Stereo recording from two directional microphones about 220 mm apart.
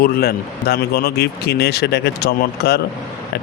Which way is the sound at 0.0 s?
45° left (ahead or behind).